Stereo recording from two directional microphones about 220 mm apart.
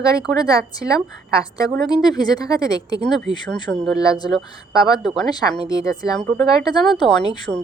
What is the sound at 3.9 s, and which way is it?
A woman's voice, 15° left (ahead or behind).